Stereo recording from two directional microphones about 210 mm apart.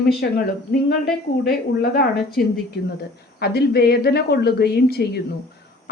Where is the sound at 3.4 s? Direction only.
50° left (ahead or behind).